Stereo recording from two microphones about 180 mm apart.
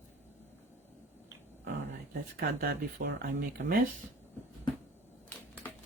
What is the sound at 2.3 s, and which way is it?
Speech, 55° right (ahead or behind).